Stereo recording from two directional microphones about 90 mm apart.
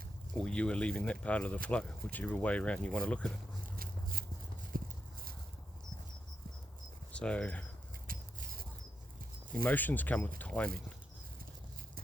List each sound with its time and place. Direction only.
0.3 s speech: 10° left (ahead or behind)
7.1 s speech: 10° left (ahead or behind)
9.5 s speech: 20° left (ahead or behind)